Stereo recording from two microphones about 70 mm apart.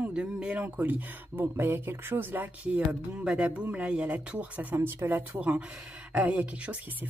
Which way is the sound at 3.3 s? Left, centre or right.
Centre.